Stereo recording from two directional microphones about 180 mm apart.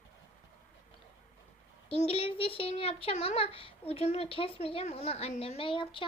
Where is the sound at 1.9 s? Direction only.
35° left (ahead or behind).